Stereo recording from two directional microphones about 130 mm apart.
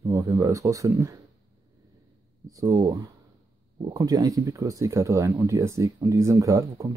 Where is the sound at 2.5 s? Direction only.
25° right (ahead or behind).